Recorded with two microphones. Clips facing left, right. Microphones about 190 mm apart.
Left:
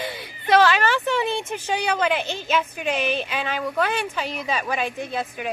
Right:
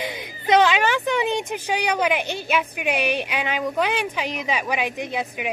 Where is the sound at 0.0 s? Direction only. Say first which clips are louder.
Right 2 dB; 15° right (ahead or behind).